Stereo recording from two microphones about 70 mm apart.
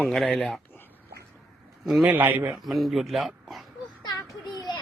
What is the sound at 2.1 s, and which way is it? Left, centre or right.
Speech, right.